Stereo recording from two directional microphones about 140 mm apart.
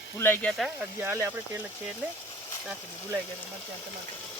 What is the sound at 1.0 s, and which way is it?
Speech, 15° right (ahead or behind).